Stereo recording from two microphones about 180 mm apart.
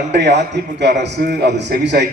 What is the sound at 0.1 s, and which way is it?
A man's voice, 70° right (ahead or behind).